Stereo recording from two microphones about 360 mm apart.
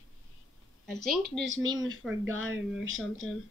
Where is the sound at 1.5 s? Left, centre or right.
Right.